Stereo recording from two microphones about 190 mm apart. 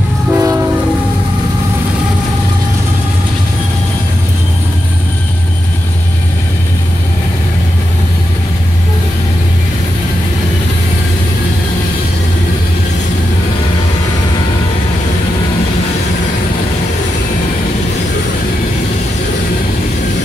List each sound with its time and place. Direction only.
0.3 s train: 15° right (ahead or behind)